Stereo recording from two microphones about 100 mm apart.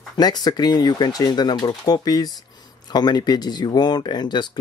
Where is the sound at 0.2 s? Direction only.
45° left (ahead or behind).